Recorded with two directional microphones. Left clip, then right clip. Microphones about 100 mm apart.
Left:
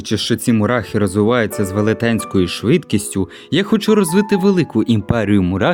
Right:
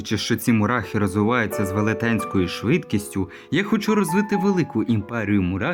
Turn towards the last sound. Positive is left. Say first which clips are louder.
# left 7 dB
turn(degrees=45)  # may be behind; listen again after turning